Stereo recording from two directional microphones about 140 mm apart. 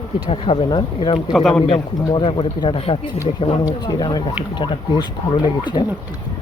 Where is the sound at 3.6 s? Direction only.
25° left (ahead or behind); by 5.9 s 45° left (ahead or behind).